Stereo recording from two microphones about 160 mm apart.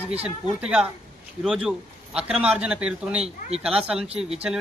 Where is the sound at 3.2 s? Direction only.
40° right (ahead or behind).